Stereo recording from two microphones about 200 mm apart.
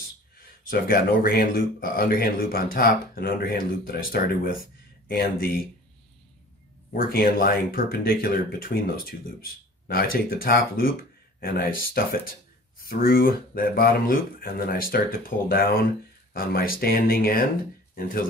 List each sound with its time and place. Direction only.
0.7 s speech: 45° left (ahead or behind)
6.9 s speech: 45° left (ahead or behind)